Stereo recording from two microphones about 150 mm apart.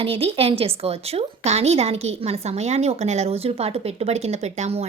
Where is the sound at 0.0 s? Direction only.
40° right (ahead or behind).